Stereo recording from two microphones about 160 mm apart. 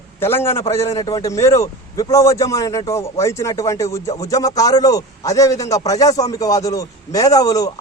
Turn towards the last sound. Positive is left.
turn(degrees=20)  # may be behind; listen again after turning